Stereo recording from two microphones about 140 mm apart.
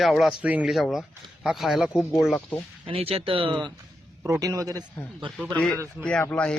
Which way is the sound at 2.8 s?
45° right (ahead or behind).